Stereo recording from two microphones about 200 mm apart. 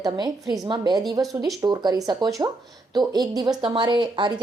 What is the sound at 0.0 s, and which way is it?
A woman's voice, 20° right (ahead or behind).